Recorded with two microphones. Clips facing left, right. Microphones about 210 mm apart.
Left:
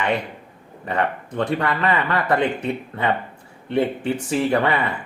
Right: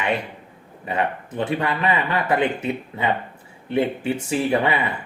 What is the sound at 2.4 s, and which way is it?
Speech, 5° right (ahead or behind).